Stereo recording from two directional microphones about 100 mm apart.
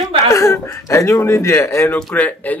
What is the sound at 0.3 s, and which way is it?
Speech, 35° left (ahead or behind).